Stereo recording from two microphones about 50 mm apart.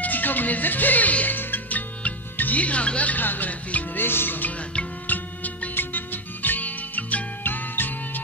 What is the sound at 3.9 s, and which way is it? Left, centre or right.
Music, left.